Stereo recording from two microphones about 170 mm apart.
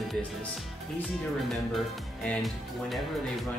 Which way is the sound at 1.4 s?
5° left (ahead or behind).